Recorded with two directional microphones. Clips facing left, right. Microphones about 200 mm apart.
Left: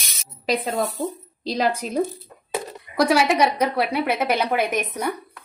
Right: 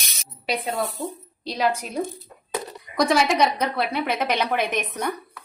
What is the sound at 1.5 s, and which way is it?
Speech, 40° left (ahead or behind).